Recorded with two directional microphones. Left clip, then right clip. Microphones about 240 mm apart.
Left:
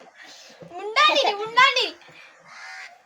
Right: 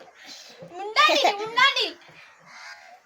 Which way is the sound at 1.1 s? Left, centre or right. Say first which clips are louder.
Even; right.